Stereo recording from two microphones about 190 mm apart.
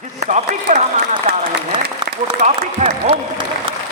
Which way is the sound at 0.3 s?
40° right (ahead or behind).